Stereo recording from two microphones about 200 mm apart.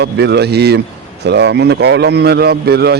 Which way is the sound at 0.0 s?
55° right (ahead or behind).